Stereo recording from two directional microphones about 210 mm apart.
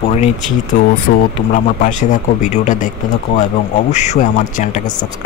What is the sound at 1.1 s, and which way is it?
Speech, 50° left (ahead or behind).